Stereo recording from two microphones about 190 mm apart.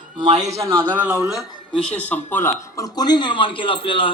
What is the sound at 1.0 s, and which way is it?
Speech, 5° right (ahead or behind).